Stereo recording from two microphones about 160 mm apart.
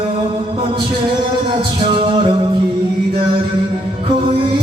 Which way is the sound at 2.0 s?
30° right (ahead or behind).